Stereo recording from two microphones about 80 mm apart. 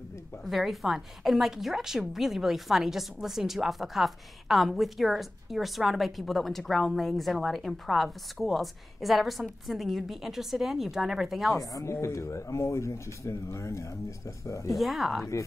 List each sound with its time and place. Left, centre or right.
0.5 s a woman's voice: centre
11.5 s speech: left
14.7 s a woman's voice: centre